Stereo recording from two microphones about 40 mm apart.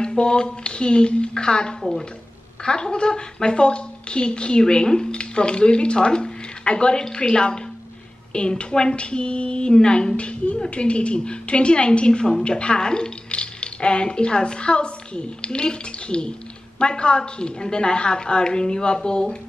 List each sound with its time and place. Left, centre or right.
0.0 s a woman's voice: left
1.8 s a woman's voice: centre
2.6 s a woman's voice: left